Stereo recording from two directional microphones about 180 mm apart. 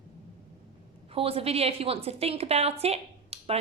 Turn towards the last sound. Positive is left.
turn(degrees=-35)  # may be behind; listen again after turning